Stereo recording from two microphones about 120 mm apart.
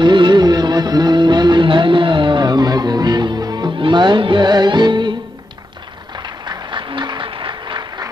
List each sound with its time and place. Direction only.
0.0 s music of bollywood: 40° right (ahead or behind)
6.2 s applause: 35° right (ahead or behind)